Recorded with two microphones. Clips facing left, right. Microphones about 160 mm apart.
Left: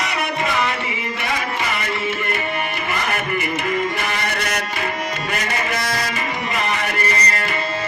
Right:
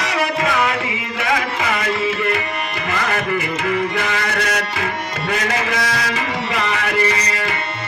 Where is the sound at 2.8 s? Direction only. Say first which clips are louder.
Right 6 dB; 90° right.